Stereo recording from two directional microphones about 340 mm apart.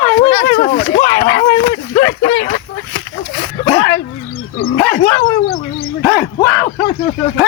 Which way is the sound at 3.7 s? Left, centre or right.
Centre.